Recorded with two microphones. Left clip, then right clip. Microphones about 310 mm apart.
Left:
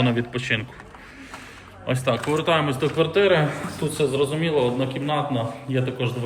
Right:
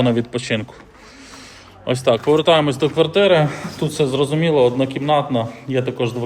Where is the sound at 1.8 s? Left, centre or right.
Centre.